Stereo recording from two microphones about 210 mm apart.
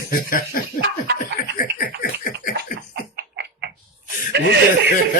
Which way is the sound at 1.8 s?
45° left (ahead or behind).